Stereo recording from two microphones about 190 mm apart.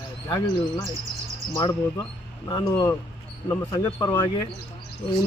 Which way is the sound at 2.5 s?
25° left (ahead or behind).